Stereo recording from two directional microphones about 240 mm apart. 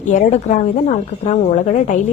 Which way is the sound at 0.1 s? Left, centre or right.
Left.